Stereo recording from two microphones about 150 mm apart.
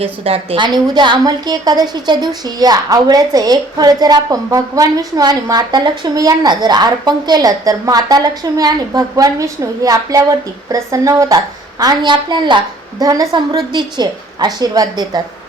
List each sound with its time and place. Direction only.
0.0 s a woman's voice: 40° right (ahead or behind)